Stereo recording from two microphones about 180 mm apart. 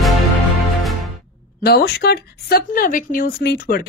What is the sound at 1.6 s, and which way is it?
A woman's voice, 60° left (ahead or behind).